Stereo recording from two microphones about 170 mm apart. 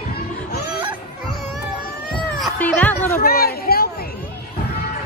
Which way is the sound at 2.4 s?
10° left (ahead or behind).